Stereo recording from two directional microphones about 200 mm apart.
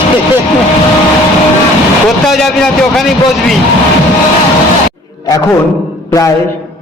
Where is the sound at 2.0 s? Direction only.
Centre (ahead or behind).